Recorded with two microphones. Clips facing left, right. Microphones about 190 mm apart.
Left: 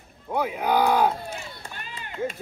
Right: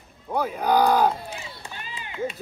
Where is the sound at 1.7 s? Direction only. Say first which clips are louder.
Right 1 dB; 50° left (ahead or behind).